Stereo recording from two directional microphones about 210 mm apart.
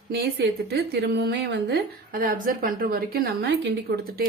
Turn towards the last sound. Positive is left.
turn(degrees=-50)  # may be behind; listen again after turning